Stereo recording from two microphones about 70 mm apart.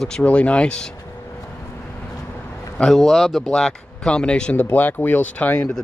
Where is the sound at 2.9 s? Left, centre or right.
Centre.